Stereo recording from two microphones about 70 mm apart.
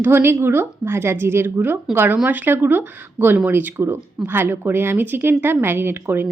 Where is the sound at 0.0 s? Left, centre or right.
Right.